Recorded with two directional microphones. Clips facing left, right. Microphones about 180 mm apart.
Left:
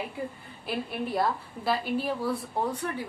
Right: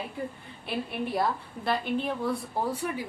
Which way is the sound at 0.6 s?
Centre (ahead or behind).